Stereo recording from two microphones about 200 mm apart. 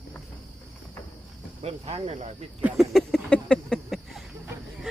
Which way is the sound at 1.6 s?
30° right (ahead or behind).